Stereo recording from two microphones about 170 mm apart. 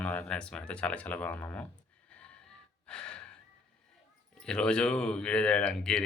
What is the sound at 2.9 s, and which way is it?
Gasp, 5° left (ahead or behind).